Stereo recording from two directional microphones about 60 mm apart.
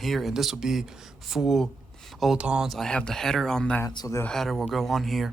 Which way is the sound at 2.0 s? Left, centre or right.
Centre.